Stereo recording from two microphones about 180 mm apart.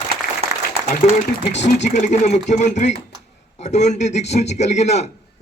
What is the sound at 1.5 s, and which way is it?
A man's voice, 40° left (ahead or behind).